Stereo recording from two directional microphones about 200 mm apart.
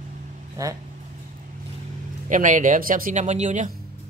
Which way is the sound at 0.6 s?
15° right (ahead or behind).